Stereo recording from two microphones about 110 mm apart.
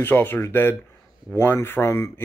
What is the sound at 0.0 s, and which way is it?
Speech, 20° left (ahead or behind).